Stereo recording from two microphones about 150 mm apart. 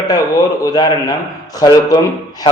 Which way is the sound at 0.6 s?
25° left (ahead or behind).